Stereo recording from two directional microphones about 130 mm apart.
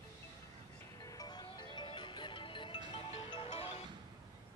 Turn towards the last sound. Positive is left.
turn(degrees=50)  # may be behind; listen again after turning